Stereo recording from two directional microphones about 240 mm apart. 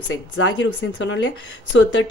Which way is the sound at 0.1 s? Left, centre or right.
Left.